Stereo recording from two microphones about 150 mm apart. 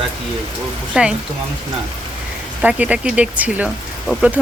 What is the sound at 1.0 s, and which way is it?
Speech, 5° right (ahead or behind).